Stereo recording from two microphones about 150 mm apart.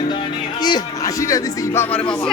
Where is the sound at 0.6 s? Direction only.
25° left (ahead or behind).